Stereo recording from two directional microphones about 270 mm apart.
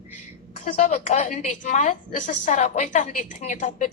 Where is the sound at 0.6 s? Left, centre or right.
Left.